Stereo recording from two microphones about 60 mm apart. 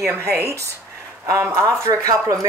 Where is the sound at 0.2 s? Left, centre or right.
Right.